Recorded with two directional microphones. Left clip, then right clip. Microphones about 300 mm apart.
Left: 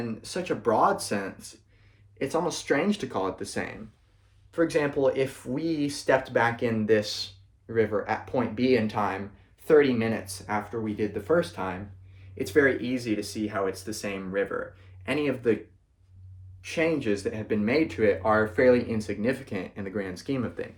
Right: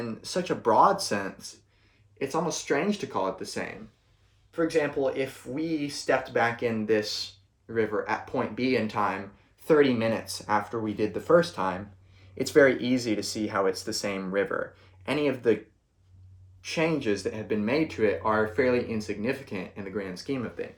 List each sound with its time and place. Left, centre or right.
0.0 s speech: centre
16.6 s speech: centre